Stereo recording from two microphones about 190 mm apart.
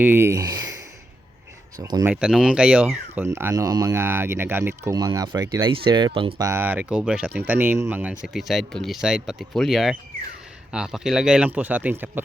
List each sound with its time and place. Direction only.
0.0 s speech: 10° right (ahead or behind)
1.8 s speech: 15° right (ahead or behind)
2.2 s speech: 5° right (ahead or behind); by 6.5 s 25° right (ahead or behind)
6.5 s speech: 10° right (ahead or behind)